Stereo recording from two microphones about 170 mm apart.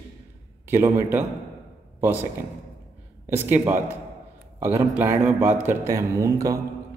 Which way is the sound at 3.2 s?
15° right (ahead or behind).